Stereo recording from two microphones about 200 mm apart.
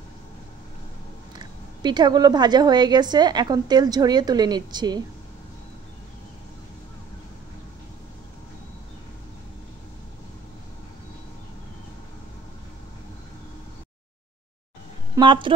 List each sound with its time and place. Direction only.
1.3 s a woman's voice: 20° right (ahead or behind)
15.1 s a woman's voice: 25° right (ahead or behind)